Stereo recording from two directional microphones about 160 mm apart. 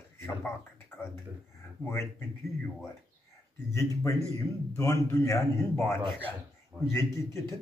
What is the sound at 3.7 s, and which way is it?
Speech, 20° left (ahead or behind).